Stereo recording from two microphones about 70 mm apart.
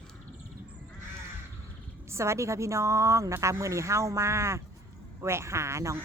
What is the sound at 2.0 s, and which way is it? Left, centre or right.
Speech, right.